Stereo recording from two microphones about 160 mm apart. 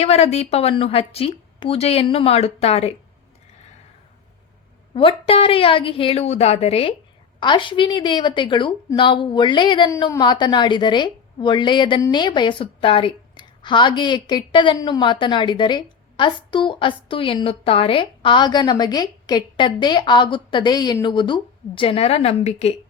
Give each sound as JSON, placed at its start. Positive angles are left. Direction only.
{"t": 0.0, "sound": "a woman's voice", "side_deg": 40}
{"t": 4.9, "sound": "a woman's voice", "side_deg": 35}